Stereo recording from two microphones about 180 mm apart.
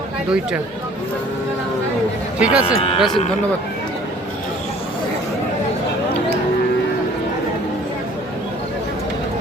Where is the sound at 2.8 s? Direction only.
30° left (ahead or behind).